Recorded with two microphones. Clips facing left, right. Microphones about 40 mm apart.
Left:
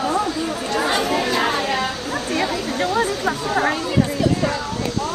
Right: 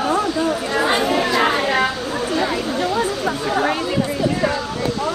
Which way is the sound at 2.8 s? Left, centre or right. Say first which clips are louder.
Left 2 dB; left.